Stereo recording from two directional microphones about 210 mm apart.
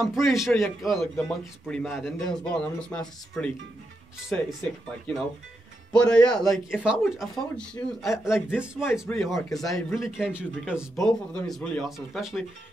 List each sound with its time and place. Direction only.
0.0 s speech: centre (ahead or behind)
5.9 s speech: 5° left (ahead or behind)